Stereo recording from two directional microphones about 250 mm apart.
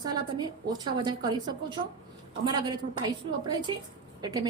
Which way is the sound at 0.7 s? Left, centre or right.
Centre.